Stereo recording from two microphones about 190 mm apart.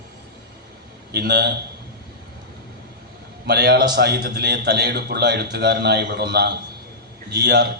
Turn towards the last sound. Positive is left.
turn(degrees=-60)  # may be behind; listen again after turning